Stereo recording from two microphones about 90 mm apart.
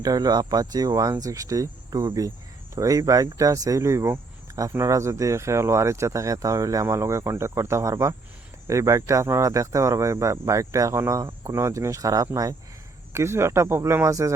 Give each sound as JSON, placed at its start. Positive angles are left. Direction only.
{"t": 0.0, "sound": "speech", "side_deg": -45}